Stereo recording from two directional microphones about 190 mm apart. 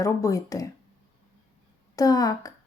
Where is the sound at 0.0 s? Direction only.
15° left (ahead or behind).